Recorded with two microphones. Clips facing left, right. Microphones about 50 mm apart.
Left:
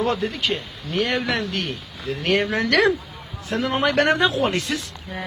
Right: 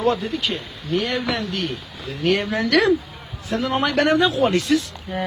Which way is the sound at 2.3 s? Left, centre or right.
Left.